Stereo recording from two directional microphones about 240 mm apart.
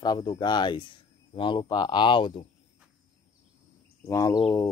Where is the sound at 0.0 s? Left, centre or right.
Centre.